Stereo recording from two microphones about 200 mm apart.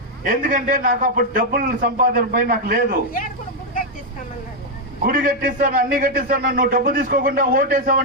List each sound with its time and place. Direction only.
0.3 s a man's voice: 45° right (ahead or behind)
5.0 s a man's voice: 45° right (ahead or behind)